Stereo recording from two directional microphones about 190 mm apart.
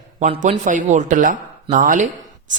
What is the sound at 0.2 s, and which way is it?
A woman's voice, 40° right (ahead or behind).